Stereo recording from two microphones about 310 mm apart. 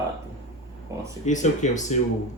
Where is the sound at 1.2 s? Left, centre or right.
Left.